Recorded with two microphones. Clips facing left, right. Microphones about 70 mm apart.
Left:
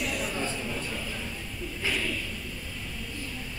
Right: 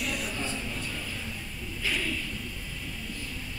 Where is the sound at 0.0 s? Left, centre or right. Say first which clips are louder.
Left 2 dB; centre.